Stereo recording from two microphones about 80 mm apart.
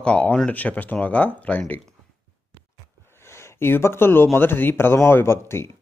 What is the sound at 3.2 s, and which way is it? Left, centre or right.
Speech, left.